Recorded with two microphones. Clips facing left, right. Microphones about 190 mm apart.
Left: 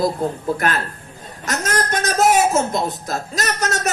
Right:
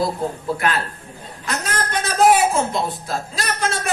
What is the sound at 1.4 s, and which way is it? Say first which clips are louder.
A man's voice: left 3 dB; 45° left (ahead or behind).